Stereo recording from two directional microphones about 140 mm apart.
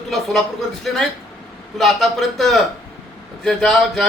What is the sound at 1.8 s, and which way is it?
A man's voice, centre (ahead or behind).